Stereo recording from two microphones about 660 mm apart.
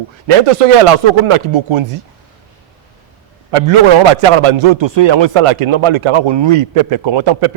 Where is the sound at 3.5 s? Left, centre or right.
Right.